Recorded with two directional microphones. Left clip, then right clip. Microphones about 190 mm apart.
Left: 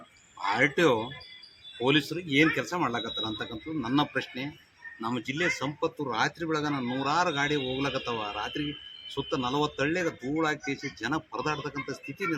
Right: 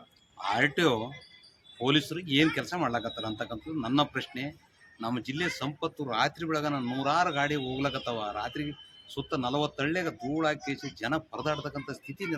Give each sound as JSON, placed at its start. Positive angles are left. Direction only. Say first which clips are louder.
{"t": 0.5, "sound": "speech", "louder": "left 2 dB", "side_deg": -25}